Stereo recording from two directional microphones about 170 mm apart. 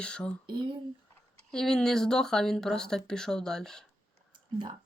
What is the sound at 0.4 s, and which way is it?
Speech, 25° right (ahead or behind).